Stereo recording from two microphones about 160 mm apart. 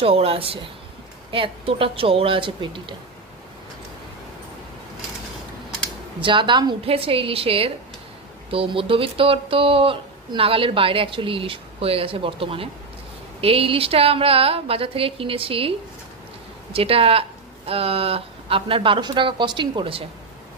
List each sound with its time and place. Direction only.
0.0 s speech: 35° right (ahead or behind)
6.2 s speech: 30° right (ahead or behind)
16.7 s speech: 35° right (ahead or behind)